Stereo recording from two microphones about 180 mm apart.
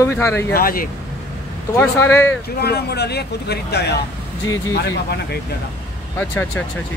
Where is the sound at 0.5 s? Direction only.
55° left (ahead or behind).